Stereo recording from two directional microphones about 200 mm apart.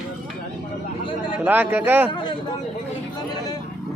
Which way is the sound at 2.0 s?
25° left (ahead or behind).